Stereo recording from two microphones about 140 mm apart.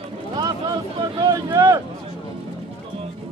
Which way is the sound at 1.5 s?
20° right (ahead or behind).